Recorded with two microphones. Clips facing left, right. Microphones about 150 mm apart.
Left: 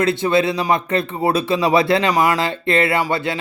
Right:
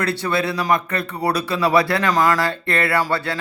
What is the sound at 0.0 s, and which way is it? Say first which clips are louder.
Speech: left 5 dB; 20° left (ahead or behind).